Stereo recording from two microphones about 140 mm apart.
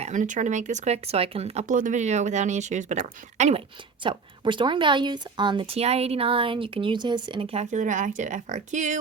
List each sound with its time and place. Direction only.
0.0 s speech: 60° right (ahead or behind)
1.6 s speech: 65° right (ahead or behind)
4.0 s speech: 35° right (ahead or behind)
7.6 s speech: 60° right (ahead or behind)